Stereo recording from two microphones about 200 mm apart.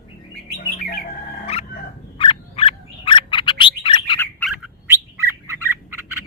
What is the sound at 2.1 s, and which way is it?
Frog, 25° left (ahead or behind).